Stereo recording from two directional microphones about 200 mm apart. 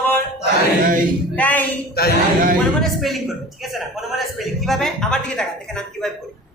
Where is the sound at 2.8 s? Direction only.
Centre (ahead or behind).